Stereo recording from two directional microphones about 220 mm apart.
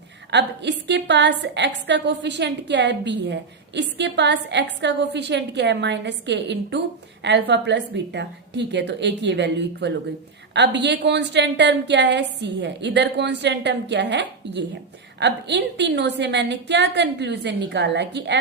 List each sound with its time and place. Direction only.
0.3 s a woman's voice: 50° right (ahead or behind)